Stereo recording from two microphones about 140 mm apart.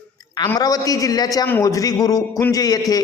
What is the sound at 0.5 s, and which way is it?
A woman's voice, 30° left (ahead or behind).